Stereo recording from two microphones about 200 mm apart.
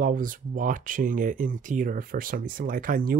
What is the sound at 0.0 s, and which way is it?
Speech, 40° right (ahead or behind).